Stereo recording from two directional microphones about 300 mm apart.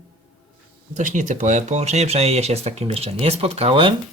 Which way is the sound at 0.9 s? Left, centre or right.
Right.